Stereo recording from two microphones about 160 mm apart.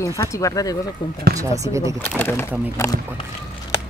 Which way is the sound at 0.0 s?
20° left (ahead or behind).